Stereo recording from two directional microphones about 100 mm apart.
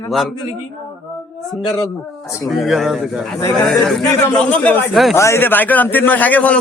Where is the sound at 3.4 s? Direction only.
35° left (ahead or behind).